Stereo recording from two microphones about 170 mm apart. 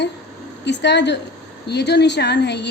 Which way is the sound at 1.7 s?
80° left.